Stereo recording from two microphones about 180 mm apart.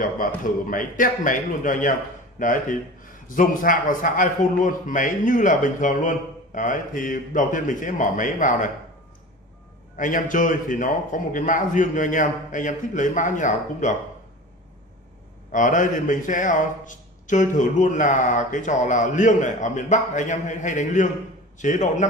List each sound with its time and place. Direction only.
0.2 s a man's voice: 45° left (ahead or behind)
9.9 s a man's voice: 45° left (ahead or behind)
15.5 s a man's voice: 45° left (ahead or behind)